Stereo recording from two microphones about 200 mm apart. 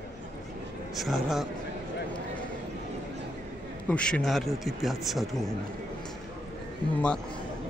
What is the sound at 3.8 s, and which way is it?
A man's voice, 5° left (ahead or behind).